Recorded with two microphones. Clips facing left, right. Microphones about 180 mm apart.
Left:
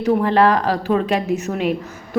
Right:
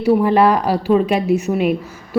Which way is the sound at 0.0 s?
10° right (ahead or behind).